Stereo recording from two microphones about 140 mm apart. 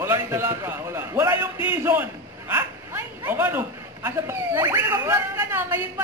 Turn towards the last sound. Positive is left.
turn(degrees=-15)  # may be behind; listen again after turning